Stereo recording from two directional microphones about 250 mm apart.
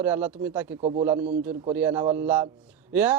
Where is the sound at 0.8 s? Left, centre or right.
Right.